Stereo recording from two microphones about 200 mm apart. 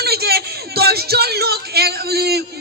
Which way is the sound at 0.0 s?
50° right (ahead or behind).